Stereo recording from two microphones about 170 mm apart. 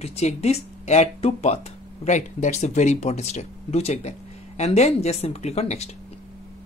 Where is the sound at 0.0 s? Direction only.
40° left (ahead or behind).